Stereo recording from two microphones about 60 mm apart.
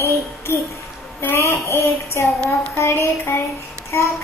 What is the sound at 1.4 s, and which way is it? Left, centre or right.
A child's voice, left.